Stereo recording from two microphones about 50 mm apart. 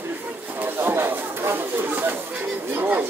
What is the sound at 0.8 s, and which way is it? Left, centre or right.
Chatter, right.